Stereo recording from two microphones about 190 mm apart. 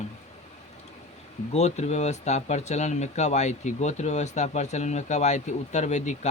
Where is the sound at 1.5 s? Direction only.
35° left (ahead or behind).